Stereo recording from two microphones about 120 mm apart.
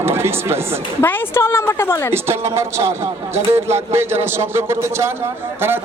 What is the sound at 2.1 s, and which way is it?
A man's voice, 20° right (ahead or behind).